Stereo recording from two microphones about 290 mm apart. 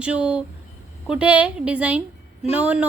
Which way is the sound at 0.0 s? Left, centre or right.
Centre.